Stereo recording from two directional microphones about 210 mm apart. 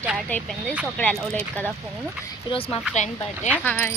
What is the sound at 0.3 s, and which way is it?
A woman's voice, 10° left (ahead or behind).